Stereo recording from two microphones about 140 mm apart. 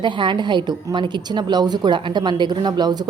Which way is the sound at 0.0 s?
35° right (ahead or behind).